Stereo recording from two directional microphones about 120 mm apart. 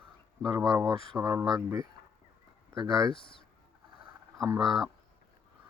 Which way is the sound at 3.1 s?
45° left (ahead or behind).